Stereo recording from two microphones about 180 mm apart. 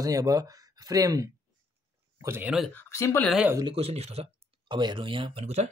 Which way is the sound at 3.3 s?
5° right (ahead or behind).